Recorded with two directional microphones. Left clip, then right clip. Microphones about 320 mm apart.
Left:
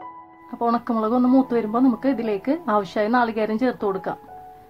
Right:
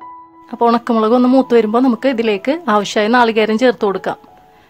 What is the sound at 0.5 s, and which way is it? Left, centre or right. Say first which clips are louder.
Speech: right 9 dB; right.